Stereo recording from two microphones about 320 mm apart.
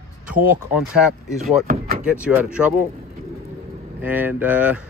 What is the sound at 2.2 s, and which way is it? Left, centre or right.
Speech, centre.